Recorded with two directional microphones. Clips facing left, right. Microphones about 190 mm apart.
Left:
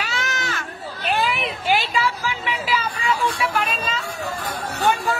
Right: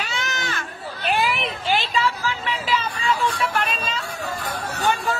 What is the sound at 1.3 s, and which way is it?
Vehicle, 5° left (ahead or behind).